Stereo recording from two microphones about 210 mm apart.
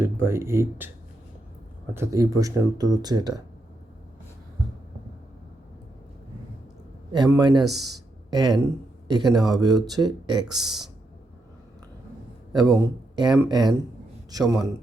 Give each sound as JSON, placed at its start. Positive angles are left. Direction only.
{"t": 0.0, "sound": "speech", "side_deg": -10}
{"t": 1.9, "sound": "speech", "side_deg": -15}
{"t": 7.1, "sound": "speech", "side_deg": -20}
{"t": 12.5, "sound": "a man's voice", "side_deg": -15}